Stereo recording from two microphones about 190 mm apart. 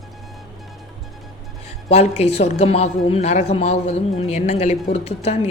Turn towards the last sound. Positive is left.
turn(degrees=35)  # may be behind; listen again after turning